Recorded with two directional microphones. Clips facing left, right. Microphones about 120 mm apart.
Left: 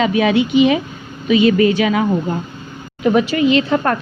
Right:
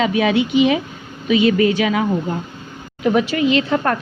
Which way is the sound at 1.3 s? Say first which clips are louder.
Left 2 dB; 40° left (ahead or behind).